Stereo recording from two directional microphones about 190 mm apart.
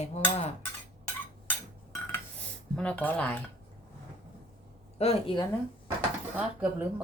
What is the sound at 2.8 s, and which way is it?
Speech, 5° left (ahead or behind).